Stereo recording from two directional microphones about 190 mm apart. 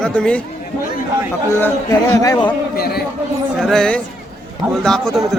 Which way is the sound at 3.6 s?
5° left (ahead or behind).